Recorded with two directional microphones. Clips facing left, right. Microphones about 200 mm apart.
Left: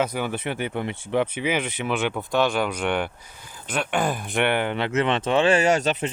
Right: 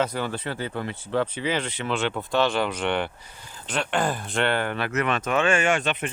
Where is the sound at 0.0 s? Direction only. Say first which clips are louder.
Left 1 dB; 15° left (ahead or behind); by 6.0 s 40° left (ahead or behind).